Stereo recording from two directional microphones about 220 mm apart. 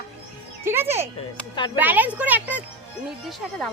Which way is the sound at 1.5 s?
20° left (ahead or behind).